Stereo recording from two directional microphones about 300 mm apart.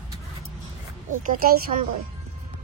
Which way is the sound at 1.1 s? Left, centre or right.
Right.